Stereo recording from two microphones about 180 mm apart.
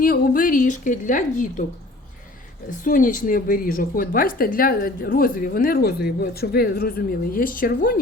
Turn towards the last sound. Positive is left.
turn(degrees=55)  # may be behind; listen again after turning